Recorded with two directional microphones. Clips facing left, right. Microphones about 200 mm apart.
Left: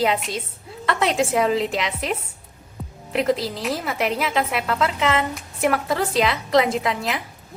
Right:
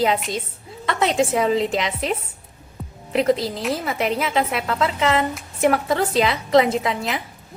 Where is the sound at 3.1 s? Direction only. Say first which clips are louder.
Right 2 dB; centre (ahead or behind).